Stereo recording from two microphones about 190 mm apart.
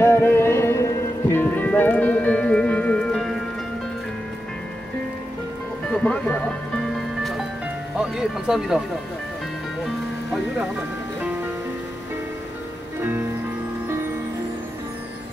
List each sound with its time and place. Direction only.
0.0 s music: 15° left (ahead or behind)
5.9 s speech: 5° left (ahead or behind)
8.0 s speech: 5° right (ahead or behind)